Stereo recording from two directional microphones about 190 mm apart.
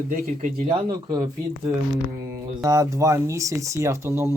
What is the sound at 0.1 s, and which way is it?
Speech, 40° right (ahead or behind).